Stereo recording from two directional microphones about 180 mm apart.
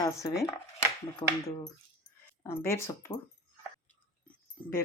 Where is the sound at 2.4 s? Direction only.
15° left (ahead or behind).